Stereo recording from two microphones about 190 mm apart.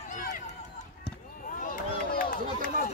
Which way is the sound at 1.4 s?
45° left (ahead or behind).